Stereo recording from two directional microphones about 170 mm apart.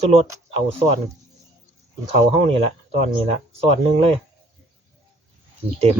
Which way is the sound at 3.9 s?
35° right (ahead or behind).